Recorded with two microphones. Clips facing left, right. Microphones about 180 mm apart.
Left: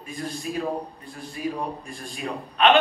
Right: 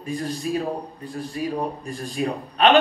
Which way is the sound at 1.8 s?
40° right (ahead or behind).